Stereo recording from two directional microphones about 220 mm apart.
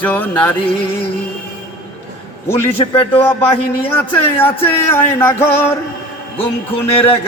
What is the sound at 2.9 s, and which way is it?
Speech, 25° left (ahead or behind).